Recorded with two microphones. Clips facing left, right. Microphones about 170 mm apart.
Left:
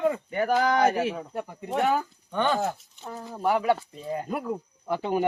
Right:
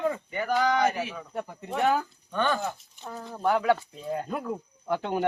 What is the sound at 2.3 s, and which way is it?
Speech, 20° left (ahead or behind).